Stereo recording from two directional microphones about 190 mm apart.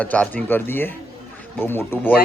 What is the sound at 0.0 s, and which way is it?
A man's voice, 10° left (ahead or behind).